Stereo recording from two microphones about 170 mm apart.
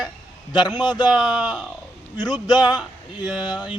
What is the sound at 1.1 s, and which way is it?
Speech, centre (ahead or behind).